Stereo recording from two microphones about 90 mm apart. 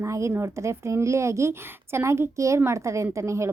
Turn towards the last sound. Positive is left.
turn(degrees=-30)  # may be behind; listen again after turning